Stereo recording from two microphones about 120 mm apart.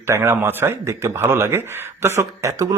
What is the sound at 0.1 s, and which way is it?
Speech, 20° right (ahead or behind).